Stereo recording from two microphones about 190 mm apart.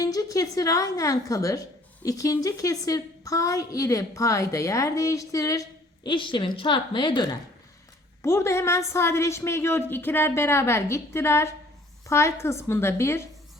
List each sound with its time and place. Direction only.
0.0 s a woman's voice: 20° left (ahead or behind)
8.2 s a woman's voice: 15° left (ahead or behind)